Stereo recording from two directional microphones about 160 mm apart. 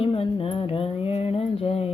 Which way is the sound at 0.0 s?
35° left (ahead or behind).